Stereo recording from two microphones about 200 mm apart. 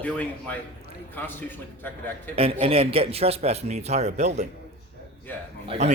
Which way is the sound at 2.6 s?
30° right (ahead or behind).